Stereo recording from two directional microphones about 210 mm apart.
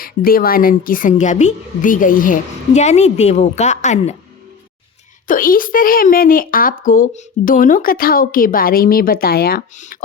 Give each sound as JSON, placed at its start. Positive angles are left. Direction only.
{"t": 0.0, "sound": "a woman's voice", "side_deg": 45}
{"t": 5.3, "sound": "speech", "side_deg": 40}